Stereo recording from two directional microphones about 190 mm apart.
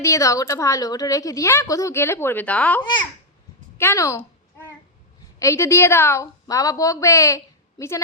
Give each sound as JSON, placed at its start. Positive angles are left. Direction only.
{"t": 0.0, "sound": "a woman's voice", "side_deg": 15}
{"t": 5.4, "sound": "a woman's voice", "side_deg": 15}